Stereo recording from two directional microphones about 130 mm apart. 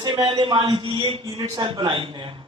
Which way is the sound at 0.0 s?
35° right (ahead or behind).